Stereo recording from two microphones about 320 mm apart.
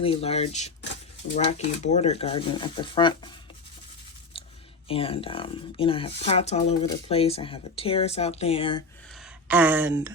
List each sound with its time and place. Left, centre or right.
0.0 s speech: centre
4.9 s speech: centre
9.5 s speech: centre